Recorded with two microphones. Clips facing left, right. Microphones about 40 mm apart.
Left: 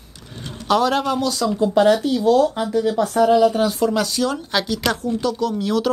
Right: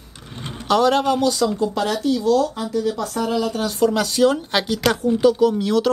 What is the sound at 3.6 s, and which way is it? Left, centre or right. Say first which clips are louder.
Speech: even; centre.